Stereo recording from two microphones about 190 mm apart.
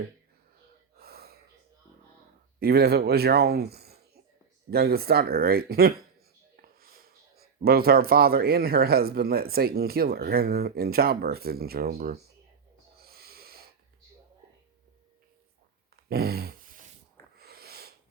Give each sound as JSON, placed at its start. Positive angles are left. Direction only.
{"t": 0.9, "sound": "gasp", "side_deg": -55}
{"t": 2.6, "sound": "speech", "side_deg": -55}
{"t": 13.0, "sound": "snort", "side_deg": -55}
{"t": 16.0, "sound": "a sound", "side_deg": -55}